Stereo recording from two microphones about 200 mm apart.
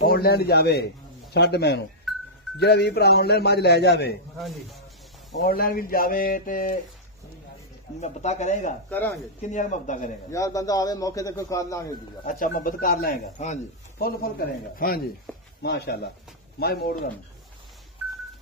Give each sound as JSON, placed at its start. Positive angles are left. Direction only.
{"t": 0.0, "sound": "a man's voice", "side_deg": 50}
{"t": 2.1, "sound": "music", "side_deg": 0}
{"t": 2.6, "sound": "speech", "side_deg": 55}
{"t": 5.3, "sound": "a man's voice", "side_deg": 50}
{"t": 8.0, "sound": "speech", "side_deg": 35}
{"t": 8.9, "sound": "a man's voice", "side_deg": 10}
{"t": 9.4, "sound": "speech", "side_deg": 40}
{"t": 10.3, "sound": "a man's voice", "side_deg": 15}
{"t": 12.3, "sound": "a man's voice", "side_deg": 45}
{"t": 15.6, "sound": "a man's voice", "side_deg": 55}